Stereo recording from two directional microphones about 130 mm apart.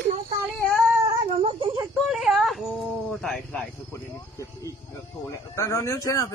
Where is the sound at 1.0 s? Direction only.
40° right (ahead or behind).